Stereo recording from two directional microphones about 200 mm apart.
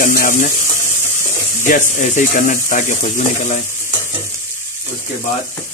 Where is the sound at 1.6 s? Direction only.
40° left (ahead or behind).